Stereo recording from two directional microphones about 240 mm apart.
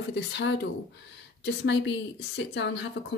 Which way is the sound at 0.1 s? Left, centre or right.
Left.